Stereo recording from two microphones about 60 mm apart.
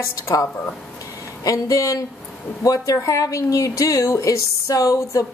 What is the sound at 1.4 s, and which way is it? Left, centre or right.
A woman's voice, left.